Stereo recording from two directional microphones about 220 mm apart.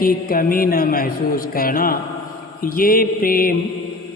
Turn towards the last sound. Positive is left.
turn(degrees=40)  # may be behind; listen again after turning